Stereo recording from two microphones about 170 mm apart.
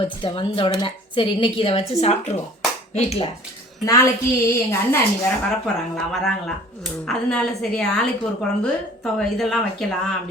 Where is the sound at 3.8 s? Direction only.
20° left (ahead or behind).